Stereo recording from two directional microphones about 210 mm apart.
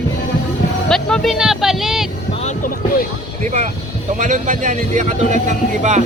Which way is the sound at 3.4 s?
35° right (ahead or behind).